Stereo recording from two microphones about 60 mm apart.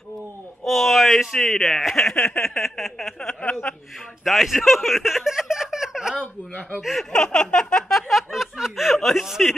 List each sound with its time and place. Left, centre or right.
0.7 s speech: centre
3.2 s a sound: centre
4.2 s speech: centre
6.8 s speech: centre
7.1 s a sound: centre
8.1 s snicker: centre